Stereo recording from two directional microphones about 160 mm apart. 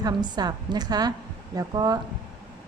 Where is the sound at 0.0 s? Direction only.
25° right (ahead or behind).